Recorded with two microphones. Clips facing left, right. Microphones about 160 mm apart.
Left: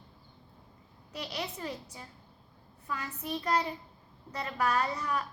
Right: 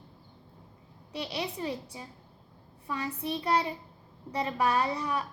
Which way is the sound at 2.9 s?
30° right (ahead or behind).